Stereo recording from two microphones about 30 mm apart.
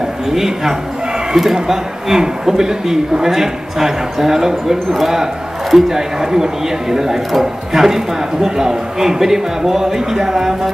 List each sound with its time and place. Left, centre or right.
0.3 s speech: centre
5.1 s a sound: centre
5.8 s speech: centre